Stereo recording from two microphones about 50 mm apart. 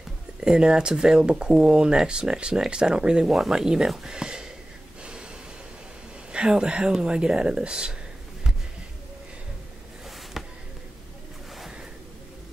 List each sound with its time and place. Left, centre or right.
0.4 s speech: centre
6.3 s speech: centre
10.4 s a sound: centre